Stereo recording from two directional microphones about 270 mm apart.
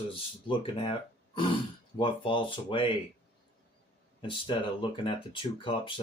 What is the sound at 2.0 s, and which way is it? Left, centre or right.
Speech, centre.